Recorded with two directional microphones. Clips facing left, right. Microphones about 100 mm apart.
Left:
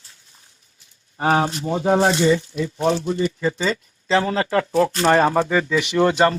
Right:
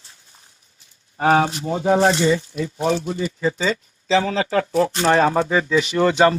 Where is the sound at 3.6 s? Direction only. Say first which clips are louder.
Right 1 dB; 45° left (ahead or behind).